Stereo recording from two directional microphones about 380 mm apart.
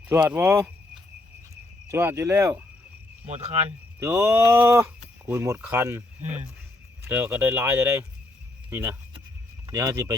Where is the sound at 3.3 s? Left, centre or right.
Centre.